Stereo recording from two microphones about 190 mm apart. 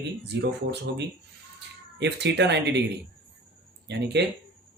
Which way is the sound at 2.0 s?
65° right (ahead or behind).